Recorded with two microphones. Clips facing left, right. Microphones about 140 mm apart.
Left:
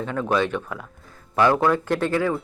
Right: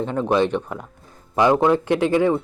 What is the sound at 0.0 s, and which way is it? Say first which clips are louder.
Speech: right 3 dB; 20° right (ahead or behind).